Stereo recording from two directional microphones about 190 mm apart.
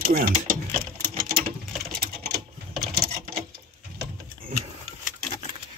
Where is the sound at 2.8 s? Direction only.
55° right (ahead or behind).